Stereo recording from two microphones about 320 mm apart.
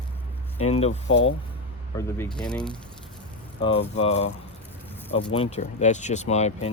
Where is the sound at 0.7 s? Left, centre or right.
Centre.